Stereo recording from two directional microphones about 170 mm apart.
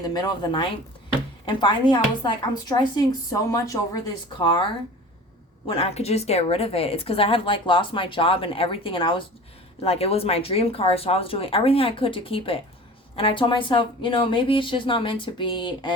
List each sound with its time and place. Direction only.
0.1 s a woman's voice: 25° left (ahead or behind)
5.6 s a woman's voice: 35° left (ahead or behind)